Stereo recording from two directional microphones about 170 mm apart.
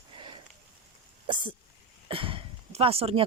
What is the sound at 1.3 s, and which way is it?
Speech, 30° right (ahead or behind).